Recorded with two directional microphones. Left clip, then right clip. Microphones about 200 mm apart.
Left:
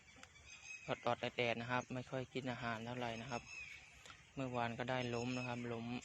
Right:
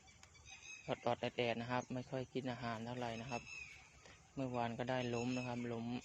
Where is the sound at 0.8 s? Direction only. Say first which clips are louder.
Even; 20° right (ahead or behind).